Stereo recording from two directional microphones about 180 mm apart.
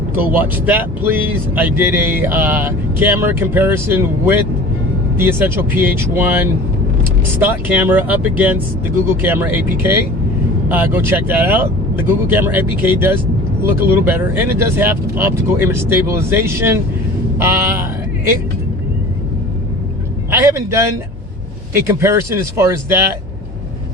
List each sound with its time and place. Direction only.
0.3 s speech: 10° right (ahead or behind)
20.3 s speech: 15° right (ahead or behind)